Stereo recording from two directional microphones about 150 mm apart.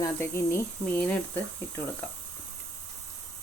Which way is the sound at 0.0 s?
15° left (ahead or behind).